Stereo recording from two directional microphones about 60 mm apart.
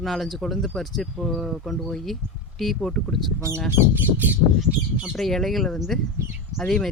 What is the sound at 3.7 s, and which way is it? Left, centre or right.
Bird, right.